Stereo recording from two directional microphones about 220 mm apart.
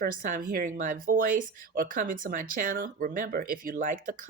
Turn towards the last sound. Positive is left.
turn(degrees=-35)  # may be behind; listen again after turning